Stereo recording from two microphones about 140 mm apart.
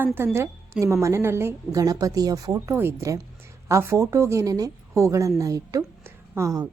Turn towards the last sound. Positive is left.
turn(degrees=-25)  # may be behind; listen again after turning